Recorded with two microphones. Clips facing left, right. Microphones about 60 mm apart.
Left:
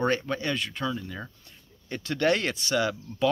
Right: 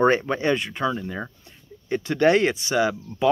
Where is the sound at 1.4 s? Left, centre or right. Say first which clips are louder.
Right 7 dB; centre.